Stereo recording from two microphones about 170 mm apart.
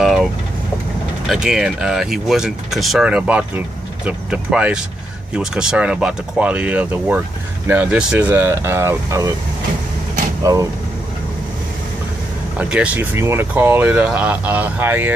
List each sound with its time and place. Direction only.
0.0 s vehicle: centre (ahead or behind)
1.3 s speech: 5° right (ahead or behind)
10.4 s speech: 20° right (ahead or behind)
12.5 s speech: 5° right (ahead or behind)